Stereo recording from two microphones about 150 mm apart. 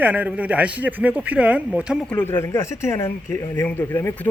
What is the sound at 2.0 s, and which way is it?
Speech, 15° left (ahead or behind).